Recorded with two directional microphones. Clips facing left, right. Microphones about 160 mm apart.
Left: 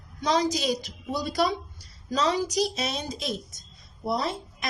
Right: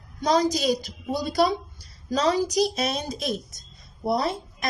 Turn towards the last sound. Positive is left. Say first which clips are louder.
# right 3 dB
turn(degrees=-40)  # may be behind; listen again after turning